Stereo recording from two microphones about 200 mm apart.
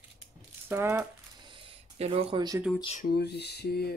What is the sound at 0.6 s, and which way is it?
Speech, 10° right (ahead or behind).